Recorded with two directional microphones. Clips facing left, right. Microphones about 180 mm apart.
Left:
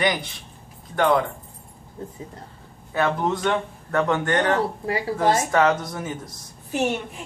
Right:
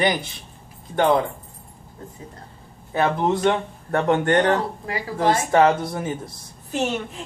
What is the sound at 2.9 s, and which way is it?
Speech, 30° right (ahead or behind).